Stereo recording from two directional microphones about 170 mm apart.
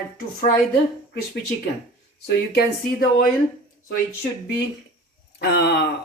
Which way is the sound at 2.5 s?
65° left (ahead or behind).